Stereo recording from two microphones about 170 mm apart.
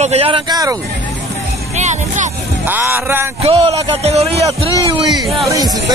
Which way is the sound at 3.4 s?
35° right (ahead or behind).